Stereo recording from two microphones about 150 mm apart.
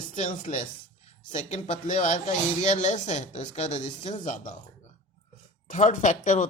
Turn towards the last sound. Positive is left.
turn(degrees=55)  # may be behind; listen again after turning